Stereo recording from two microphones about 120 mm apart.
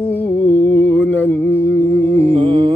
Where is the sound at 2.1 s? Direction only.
60° right (ahead or behind).